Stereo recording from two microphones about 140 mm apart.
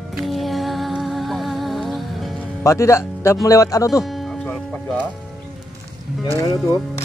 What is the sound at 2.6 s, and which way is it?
Speech, 20° left (ahead or behind).